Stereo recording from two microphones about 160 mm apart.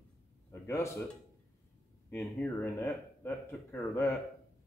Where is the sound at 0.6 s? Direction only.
20° left (ahead or behind).